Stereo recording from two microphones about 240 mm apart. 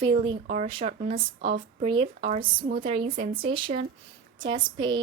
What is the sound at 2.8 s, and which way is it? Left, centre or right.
A woman's voice, right.